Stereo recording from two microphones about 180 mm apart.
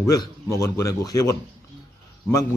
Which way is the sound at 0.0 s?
20° left (ahead or behind).